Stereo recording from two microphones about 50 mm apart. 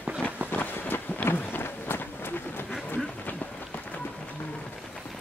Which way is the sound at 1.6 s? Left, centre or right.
Left.